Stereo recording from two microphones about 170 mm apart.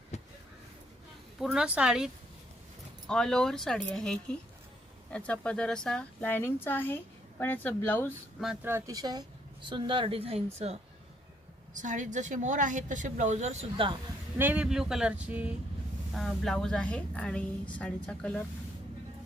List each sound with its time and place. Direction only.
1.4 s a woman's voice: 5° right (ahead or behind)
3.1 s a woman's voice: 5° left (ahead or behind)
8.6 s speech: 15° right (ahead or behind); by 10.8 s 35° right (ahead or behind)
11.7 s a woman's voice: 45° right (ahead or behind)
14.3 s a woman's voice: 10° right (ahead or behind); by 18.4 s 5° left (ahead or behind)